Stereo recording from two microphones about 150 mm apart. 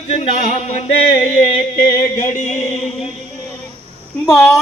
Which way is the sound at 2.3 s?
55° left (ahead or behind).